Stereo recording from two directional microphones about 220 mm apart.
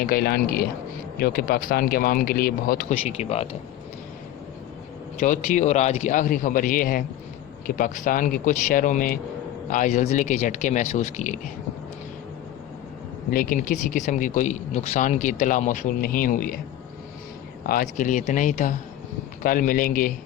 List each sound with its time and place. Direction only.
0.0 s speech: 45° left (ahead or behind)
2.9 s speech: 25° left (ahead or behind)
5.2 s speech: 35° left (ahead or behind)
13.3 s speech: 40° left (ahead or behind)
17.7 s speech: 40° left (ahead or behind)